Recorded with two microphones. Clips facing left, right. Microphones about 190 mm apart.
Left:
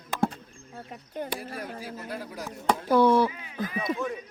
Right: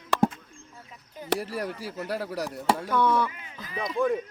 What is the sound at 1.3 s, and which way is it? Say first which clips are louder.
A man's voice: right 6 dB; 70° right (ahead or behind).